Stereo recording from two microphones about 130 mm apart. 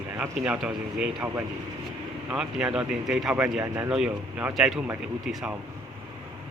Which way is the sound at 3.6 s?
20° right (ahead or behind).